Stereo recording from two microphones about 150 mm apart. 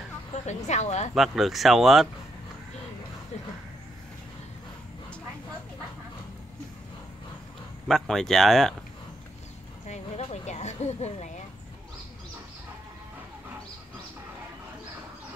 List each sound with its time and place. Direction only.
0.5 s speech: 50° left (ahead or behind)
1.1 s speech: centre (ahead or behind)
7.9 s speech: 5° left (ahead or behind)
9.8 s a sound: 50° left (ahead or behind)